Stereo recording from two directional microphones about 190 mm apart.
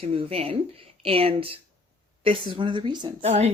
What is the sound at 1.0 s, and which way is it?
Cutlery, 30° right (ahead or behind).